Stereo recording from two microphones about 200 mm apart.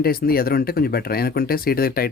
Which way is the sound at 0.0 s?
50° left (ahead or behind).